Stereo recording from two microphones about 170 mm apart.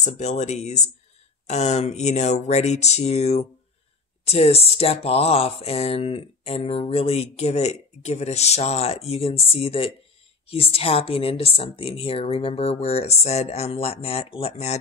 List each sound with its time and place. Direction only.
0.0 s speech: 40° left (ahead or behind)